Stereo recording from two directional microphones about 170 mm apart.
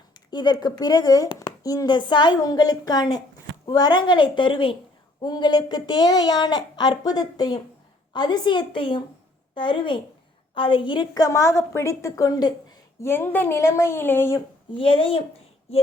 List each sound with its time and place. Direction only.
0.3 s speech: 25° left (ahead or behind)
14.7 s speech: 30° left (ahead or behind)